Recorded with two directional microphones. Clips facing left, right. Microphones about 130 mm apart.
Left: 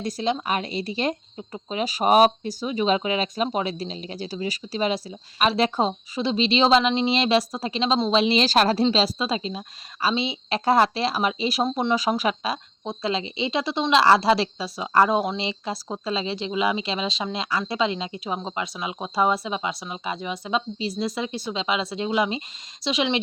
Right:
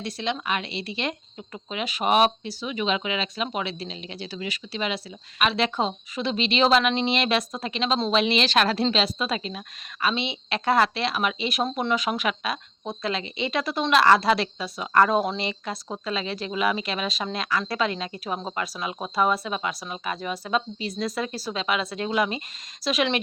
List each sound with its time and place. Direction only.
0.0 s speech: 40° left (ahead or behind)
1.4 s speech: 25° left (ahead or behind)
1.8 s speech: 35° left (ahead or behind)
15.0 s speech: 15° left (ahead or behind)